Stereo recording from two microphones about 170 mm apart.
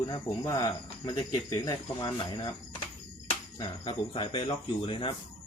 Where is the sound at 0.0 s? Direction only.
25° left (ahead or behind).